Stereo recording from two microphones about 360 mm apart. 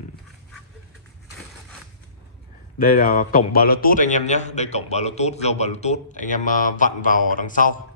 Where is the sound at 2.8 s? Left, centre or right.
Left.